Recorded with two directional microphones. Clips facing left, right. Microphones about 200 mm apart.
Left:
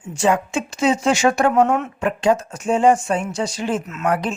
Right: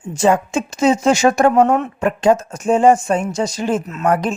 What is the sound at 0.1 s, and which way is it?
Speech, 40° right (ahead or behind).